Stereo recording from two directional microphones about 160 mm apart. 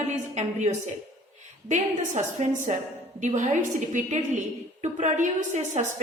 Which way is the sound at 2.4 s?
50° right (ahead or behind).